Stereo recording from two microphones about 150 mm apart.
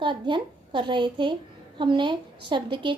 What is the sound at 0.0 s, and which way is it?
A woman's voice, 30° right (ahead or behind).